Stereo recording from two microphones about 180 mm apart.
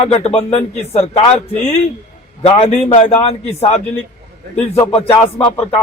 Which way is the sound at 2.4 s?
35° left (ahead or behind).